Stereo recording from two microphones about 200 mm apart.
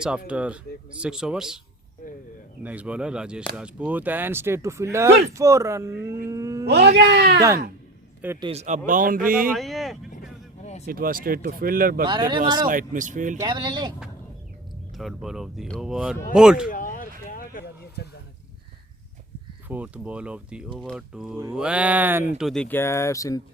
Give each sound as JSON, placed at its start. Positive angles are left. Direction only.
{"t": 0.3, "sound": "speech", "side_deg": -5}
{"t": 2.6, "sound": "speech", "side_deg": -5}
{"t": 6.2, "sound": "a sound", "side_deg": -15}
{"t": 6.7, "sound": "speech", "side_deg": -55}
{"t": 8.4, "sound": "speech", "side_deg": -30}
{"t": 9.5, "sound": "speech", "side_deg": 0}
{"t": 10.6, "sound": "a sound", "side_deg": 35}
{"t": 10.8, "sound": "speech", "side_deg": -45}
{"t": 12.0, "sound": "speech", "side_deg": -25}
{"t": 12.6, "sound": "speech", "side_deg": -40}
{"t": 13.4, "sound": "speech", "side_deg": -20}
{"t": 14.9, "sound": "speech", "side_deg": 0}
{"t": 16.6, "sound": "a sound", "side_deg": 45}
{"t": 19.6, "sound": "speech", "side_deg": -10}